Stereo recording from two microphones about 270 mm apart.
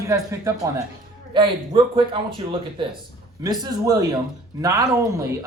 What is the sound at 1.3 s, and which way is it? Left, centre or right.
Speech, centre.